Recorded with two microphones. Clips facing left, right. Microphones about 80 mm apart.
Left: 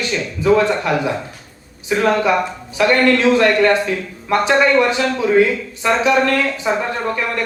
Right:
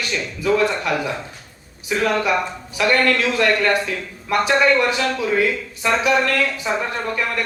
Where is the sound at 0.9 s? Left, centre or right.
Left.